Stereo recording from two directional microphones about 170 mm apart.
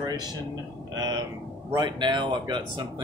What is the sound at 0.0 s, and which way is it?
Speech, 25° right (ahead or behind).